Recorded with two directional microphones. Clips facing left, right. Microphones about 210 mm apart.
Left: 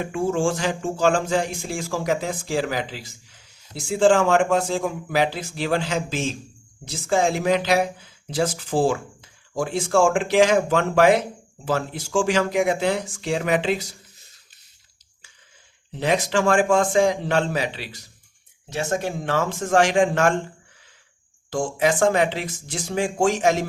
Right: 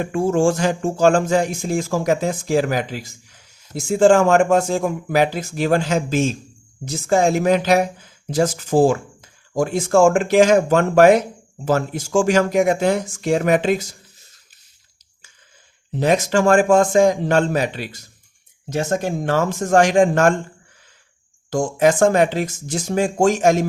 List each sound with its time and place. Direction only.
0.0 s speech: 45° right (ahead or behind)
15.9 s speech: 45° right (ahead or behind)
21.5 s speech: 45° right (ahead or behind)